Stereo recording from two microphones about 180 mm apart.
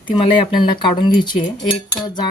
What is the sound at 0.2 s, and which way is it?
Speech, 25° left (ahead or behind).